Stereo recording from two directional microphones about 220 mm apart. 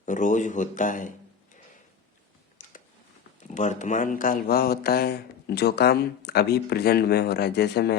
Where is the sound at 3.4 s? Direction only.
35° left (ahead or behind); by 8.0 s 50° left (ahead or behind).